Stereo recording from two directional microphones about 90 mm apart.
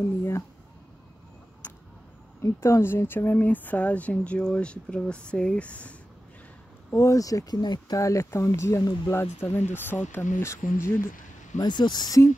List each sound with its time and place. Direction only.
0.0 s a sound: 30° left (ahead or behind)
2.4 s speech: 30° left (ahead or behind); by 5.9 s 15° left (ahead or behind)
6.9 s speech: 35° left (ahead or behind)
8.0 s speech: 35° left (ahead or behind)
11.6 s speech: 55° left (ahead or behind)